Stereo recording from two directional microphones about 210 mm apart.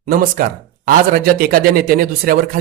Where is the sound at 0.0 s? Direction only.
40° right (ahead or behind).